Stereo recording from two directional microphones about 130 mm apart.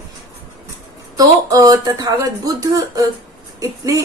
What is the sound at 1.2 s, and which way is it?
A woman's voice, 25° right (ahead or behind).